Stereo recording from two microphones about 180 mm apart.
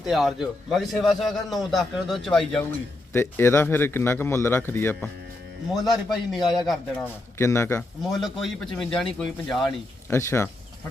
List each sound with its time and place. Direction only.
0.0 s a man's voice: centre (ahead or behind)
5.7 s a man's voice: centre (ahead or behind)
6.4 s a man's voice: 25° left (ahead or behind)
8.1 s a man's voice: centre (ahead or behind)
9.6 s a man's voice: 15° left (ahead or behind)